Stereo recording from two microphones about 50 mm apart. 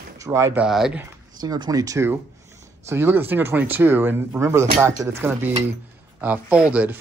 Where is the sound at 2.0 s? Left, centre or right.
Right.